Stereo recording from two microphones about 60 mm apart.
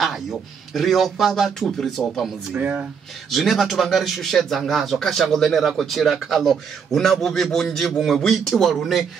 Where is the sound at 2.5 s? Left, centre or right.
Right.